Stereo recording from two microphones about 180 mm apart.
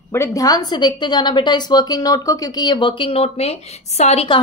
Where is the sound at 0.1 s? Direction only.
15° left (ahead or behind).